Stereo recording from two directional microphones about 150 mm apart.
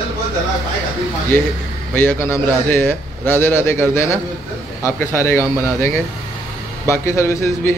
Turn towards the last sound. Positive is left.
turn(degrees=20)  # may be behind; listen again after turning